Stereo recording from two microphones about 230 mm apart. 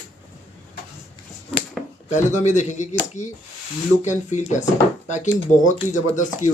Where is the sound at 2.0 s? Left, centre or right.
Left.